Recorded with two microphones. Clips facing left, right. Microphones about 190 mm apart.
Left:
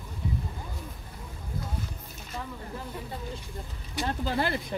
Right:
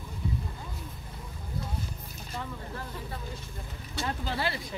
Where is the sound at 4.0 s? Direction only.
45° left (ahead or behind).